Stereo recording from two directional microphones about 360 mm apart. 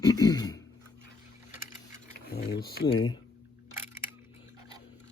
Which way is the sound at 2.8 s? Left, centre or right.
Centre.